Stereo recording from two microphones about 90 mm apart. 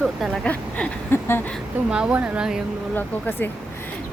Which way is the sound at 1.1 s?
25° left (ahead or behind).